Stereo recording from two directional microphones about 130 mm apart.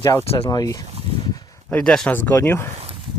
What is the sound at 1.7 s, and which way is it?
Speech, 5° left (ahead or behind).